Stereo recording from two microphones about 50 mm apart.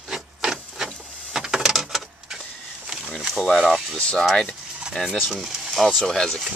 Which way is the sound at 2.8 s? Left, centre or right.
Centre.